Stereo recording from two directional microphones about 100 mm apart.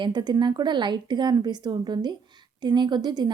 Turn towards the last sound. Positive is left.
turn(degrees=-45)  # may be behind; listen again after turning